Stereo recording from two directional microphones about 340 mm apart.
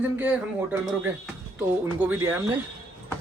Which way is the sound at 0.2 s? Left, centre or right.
Centre.